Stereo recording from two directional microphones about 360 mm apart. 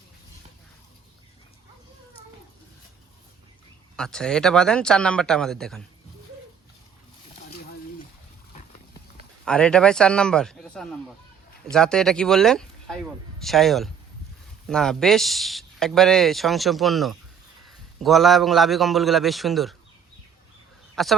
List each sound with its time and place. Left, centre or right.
3.9 s speech: centre
9.4 s speech: centre
20.9 s speech: centre